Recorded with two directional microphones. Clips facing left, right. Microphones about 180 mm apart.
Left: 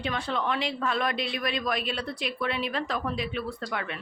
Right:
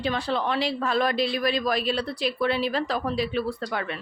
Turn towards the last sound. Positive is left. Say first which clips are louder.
# right 4 dB
turn(degrees=-35)  # may be behind; listen again after turning